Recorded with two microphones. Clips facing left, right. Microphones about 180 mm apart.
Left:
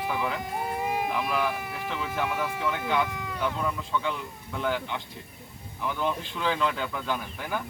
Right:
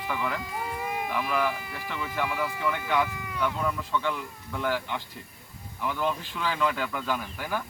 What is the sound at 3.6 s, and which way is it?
Speech, centre (ahead or behind).